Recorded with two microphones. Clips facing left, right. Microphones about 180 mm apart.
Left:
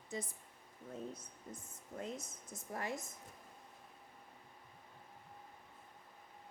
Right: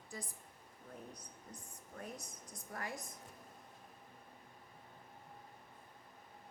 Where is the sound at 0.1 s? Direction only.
20° left (ahead or behind).